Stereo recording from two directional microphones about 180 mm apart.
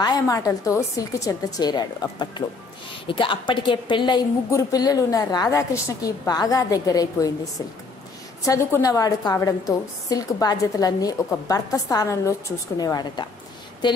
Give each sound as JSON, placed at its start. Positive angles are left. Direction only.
{"t": 0.0, "sound": "a woman's voice", "side_deg": 20}
{"t": 8.5, "sound": "a woman's voice", "side_deg": 20}